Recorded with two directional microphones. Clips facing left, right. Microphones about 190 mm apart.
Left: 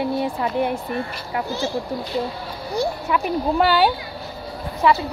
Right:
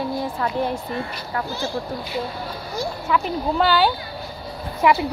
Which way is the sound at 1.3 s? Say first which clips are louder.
Left 1 dB; 15° left (ahead or behind).